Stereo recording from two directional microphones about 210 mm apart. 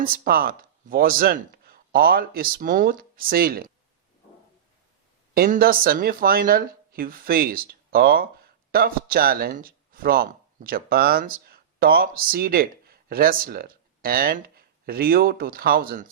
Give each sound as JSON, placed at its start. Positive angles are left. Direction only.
{"t": 0.0, "sound": "speech", "side_deg": -45}
{"t": 5.3, "sound": "speech", "side_deg": -45}